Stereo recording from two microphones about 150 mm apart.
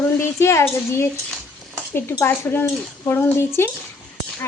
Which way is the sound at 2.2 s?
15° left (ahead or behind).